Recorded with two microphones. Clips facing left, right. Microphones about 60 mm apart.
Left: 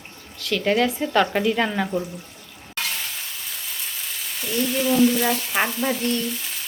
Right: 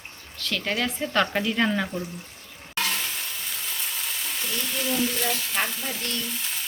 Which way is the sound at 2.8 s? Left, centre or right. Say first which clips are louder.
Right 1 dB; centre.